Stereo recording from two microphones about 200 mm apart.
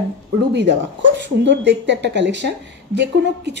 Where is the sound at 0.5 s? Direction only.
60° right (ahead or behind).